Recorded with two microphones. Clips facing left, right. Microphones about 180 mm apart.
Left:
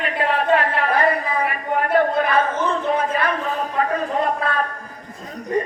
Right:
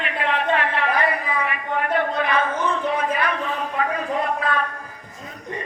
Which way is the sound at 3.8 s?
40° left (ahead or behind).